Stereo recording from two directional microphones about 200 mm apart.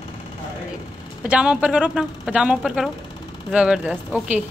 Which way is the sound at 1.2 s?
5° right (ahead or behind).